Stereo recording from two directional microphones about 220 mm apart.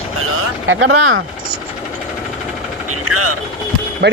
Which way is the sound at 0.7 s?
60° right (ahead or behind).